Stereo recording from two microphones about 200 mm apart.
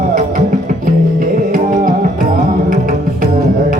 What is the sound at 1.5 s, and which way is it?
Music, 45° right (ahead or behind).